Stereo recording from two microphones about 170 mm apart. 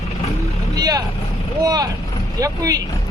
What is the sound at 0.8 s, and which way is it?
Speech, 20° right (ahead or behind).